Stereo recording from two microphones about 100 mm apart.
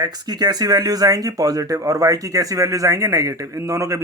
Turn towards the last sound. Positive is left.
turn(degrees=-30)  # may be behind; listen again after turning